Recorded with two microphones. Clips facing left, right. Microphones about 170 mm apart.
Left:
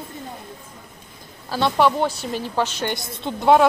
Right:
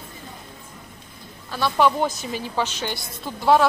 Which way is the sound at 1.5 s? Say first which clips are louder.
Left 3 dB; 35° left (ahead or behind).